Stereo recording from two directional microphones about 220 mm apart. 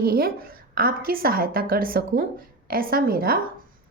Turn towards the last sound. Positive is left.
turn(degrees=-45)  # may be behind; listen again after turning